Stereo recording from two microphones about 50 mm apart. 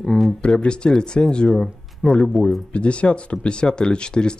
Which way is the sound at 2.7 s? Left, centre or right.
Left.